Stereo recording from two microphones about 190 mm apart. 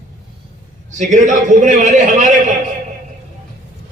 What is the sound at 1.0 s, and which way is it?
A man's voice, 40° right (ahead or behind).